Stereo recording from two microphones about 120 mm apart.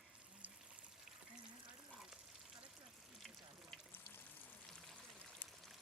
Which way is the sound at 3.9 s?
20° left (ahead or behind).